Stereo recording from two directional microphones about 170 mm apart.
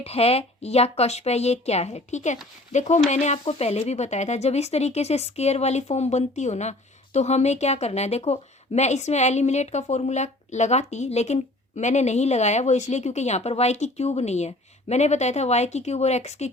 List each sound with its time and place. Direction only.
0.0 s speech: 35° left (ahead or behind)